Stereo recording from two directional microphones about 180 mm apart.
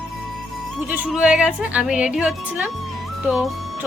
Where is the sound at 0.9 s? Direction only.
5° right (ahead or behind).